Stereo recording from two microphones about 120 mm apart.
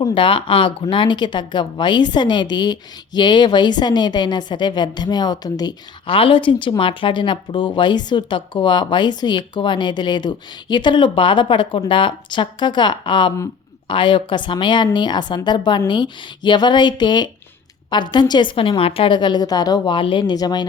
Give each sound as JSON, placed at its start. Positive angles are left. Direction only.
{"t": 0.1, "sound": "speech", "side_deg": 45}
{"t": 6.1, "sound": "speech", "side_deg": 50}